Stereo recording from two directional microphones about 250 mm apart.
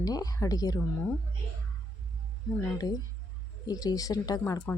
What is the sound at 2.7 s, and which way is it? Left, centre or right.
Speech, centre.